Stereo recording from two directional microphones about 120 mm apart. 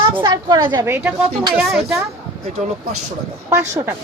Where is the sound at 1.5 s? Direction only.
Centre (ahead or behind).